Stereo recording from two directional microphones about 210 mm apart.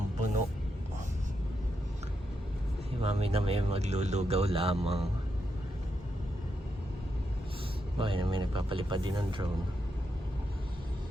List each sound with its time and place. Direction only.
3.0 s speech: 30° right (ahead or behind)
7.9 s speech: 25° right (ahead or behind)